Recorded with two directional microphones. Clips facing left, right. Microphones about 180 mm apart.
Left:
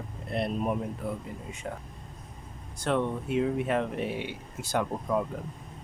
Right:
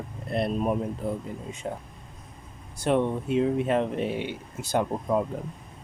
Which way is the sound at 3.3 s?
25° right (ahead or behind).